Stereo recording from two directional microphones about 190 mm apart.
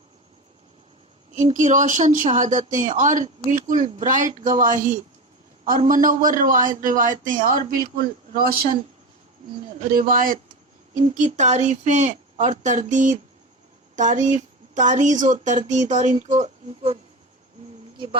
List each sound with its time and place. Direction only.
1.4 s a man's voice: 40° right (ahead or behind)
9.7 s a man's voice: 45° right (ahead or behind)
17.9 s a sound: 25° right (ahead or behind)